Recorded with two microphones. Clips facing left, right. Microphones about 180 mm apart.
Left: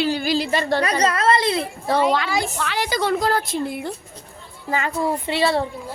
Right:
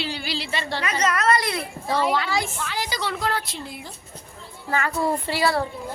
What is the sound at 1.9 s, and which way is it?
A child's voice, 70° left (ahead or behind).